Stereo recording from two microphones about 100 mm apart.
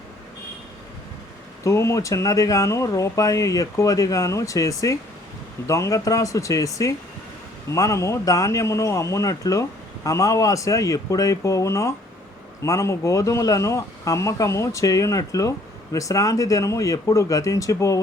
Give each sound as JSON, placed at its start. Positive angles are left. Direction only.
{"t": 1.6, "sound": "speech", "side_deg": 30}